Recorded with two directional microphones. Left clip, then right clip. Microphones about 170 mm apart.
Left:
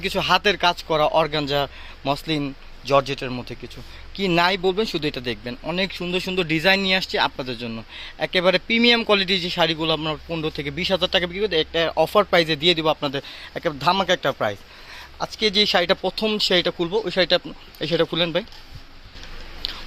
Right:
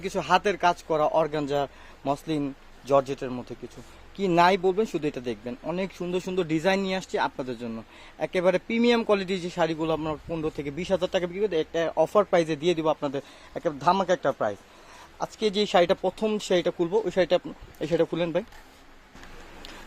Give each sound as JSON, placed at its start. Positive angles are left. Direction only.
{"t": 0.0, "sound": "speech", "side_deg": 0}
{"t": 19.6, "sound": "biting", "side_deg": -35}